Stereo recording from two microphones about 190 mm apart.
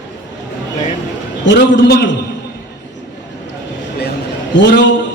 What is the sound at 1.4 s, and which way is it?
Speech, 70° left (ahead or behind).